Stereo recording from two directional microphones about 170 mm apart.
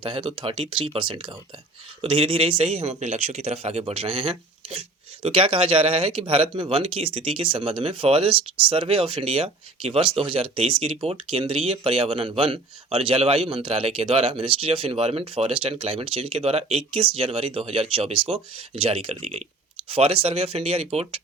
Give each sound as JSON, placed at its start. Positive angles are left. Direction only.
{"t": 0.0, "sound": "speech", "side_deg": -30}